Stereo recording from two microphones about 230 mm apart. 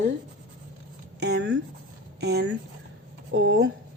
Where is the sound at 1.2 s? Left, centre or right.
Right.